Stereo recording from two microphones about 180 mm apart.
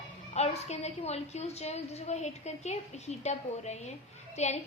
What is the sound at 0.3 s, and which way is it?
A woman's voice, 35° left (ahead or behind).